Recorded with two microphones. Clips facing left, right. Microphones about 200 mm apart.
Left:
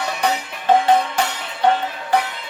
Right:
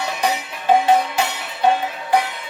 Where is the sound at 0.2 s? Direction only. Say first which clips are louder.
Even; 10° right (ahead or behind).